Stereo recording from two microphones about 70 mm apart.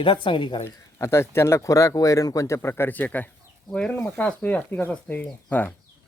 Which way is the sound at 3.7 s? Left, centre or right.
Centre.